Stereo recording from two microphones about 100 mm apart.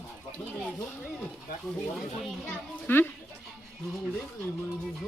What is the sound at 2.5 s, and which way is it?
Speech, 20° left (ahead or behind).